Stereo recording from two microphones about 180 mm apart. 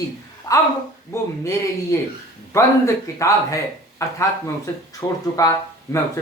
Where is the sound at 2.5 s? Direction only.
15° left (ahead or behind).